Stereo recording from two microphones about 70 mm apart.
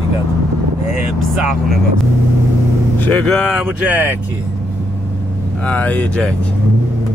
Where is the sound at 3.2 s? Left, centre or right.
Centre.